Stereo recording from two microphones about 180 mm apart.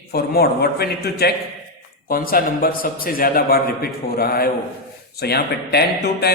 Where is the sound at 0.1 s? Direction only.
60° left (ahead or behind).